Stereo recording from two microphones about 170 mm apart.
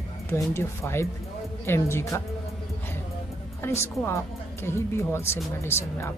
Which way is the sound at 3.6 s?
15° left (ahead or behind).